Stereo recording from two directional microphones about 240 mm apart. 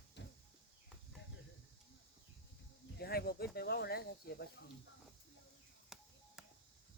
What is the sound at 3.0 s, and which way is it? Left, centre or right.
Speech, left.